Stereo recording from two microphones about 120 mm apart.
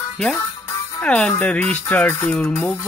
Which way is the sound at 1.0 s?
10° left (ahead or behind).